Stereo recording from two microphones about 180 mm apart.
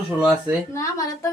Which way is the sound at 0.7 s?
20° left (ahead or behind).